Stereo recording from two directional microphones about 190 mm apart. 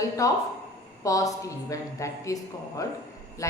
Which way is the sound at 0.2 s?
15° left (ahead or behind).